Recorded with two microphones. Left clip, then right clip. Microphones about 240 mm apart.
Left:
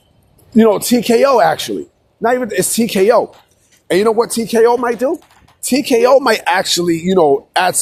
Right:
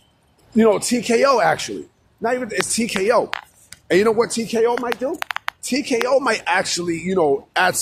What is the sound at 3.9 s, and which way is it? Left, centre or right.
Speech, centre.